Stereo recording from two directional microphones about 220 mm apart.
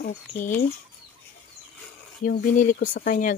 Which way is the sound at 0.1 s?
35° left (ahead or behind).